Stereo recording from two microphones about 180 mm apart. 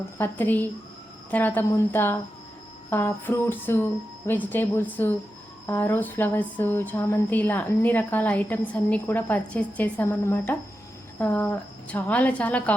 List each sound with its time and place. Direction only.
0.2 s speech: 10° left (ahead or behind)